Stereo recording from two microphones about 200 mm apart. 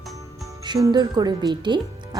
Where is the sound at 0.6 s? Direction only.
20° right (ahead or behind).